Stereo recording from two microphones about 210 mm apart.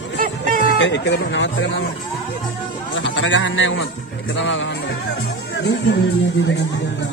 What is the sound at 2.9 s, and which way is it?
A man's voice, 60° left (ahead or behind).